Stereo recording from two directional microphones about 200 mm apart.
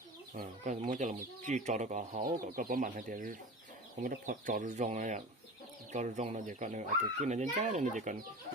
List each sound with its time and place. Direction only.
0.3 s speech: 40° right (ahead or behind)